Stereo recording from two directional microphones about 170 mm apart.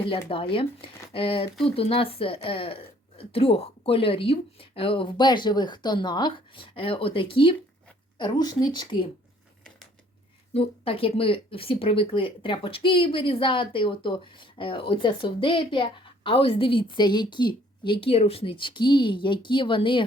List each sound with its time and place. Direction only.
0.0 s speech: 30° left (ahead or behind)
10.5 s speech: 35° left (ahead or behind)